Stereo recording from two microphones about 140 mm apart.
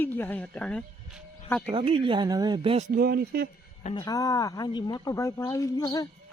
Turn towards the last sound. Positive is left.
turn(degrees=25)  # may be behind; listen again after turning